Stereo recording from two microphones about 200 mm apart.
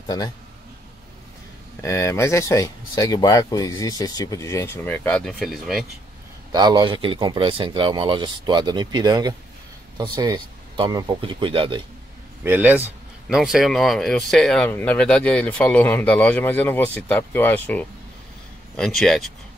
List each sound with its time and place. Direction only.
1.8 s speech: 15° left (ahead or behind); by 5.9 s centre (ahead or behind)
6.5 s speech: 20° right (ahead or behind)
12.4 s speech: 10° right (ahead or behind)